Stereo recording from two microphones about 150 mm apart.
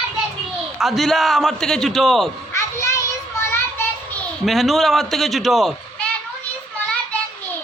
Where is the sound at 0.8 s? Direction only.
Centre (ahead or behind).